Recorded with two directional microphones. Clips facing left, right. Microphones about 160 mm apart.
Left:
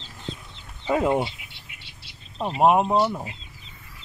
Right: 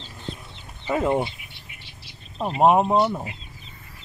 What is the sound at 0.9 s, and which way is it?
Speech, 15° left (ahead or behind).